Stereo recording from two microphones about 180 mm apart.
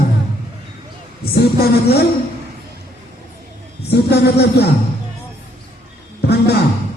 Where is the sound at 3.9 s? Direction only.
65° left (ahead or behind).